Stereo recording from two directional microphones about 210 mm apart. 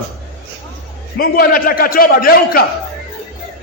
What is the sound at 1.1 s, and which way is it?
A man's voice, 45° left (ahead or behind).